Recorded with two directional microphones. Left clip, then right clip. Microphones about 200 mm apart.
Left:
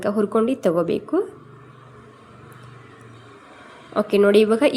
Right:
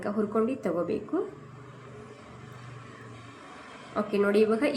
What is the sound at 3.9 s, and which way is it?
Speech, 40° left (ahead or behind).